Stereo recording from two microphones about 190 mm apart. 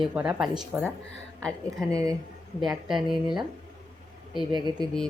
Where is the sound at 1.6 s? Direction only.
15° right (ahead or behind).